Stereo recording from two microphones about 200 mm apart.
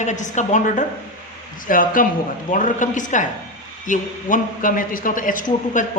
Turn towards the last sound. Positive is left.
turn(degrees=40)  # may be behind; listen again after turning